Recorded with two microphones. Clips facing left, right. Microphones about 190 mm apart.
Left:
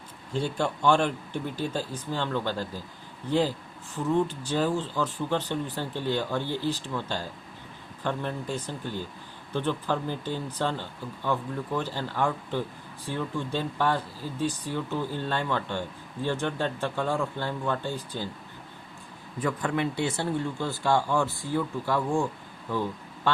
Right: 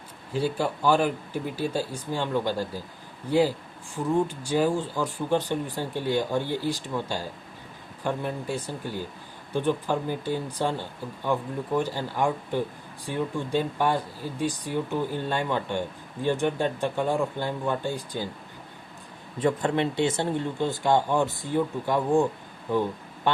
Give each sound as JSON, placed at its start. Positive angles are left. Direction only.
{"t": 0.3, "sound": "speech", "side_deg": -5}
{"t": 19.4, "sound": "speech", "side_deg": -25}